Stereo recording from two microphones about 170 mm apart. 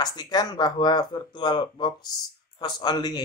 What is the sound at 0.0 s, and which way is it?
Speech, 25° left (ahead or behind).